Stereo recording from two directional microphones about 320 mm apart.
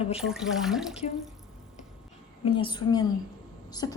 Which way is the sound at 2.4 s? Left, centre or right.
Centre.